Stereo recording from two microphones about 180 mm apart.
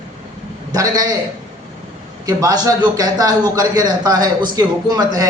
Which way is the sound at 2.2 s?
20° right (ahead or behind).